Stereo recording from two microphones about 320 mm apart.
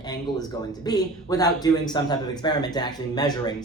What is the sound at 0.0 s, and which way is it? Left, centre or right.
A man's voice, centre.